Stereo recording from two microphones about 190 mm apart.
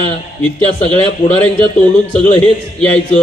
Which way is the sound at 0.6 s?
35° left (ahead or behind).